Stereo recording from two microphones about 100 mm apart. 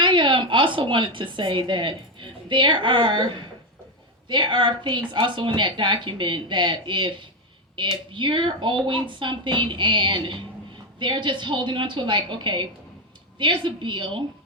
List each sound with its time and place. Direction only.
0.0 s a woman's voice: 55° right (ahead or behind)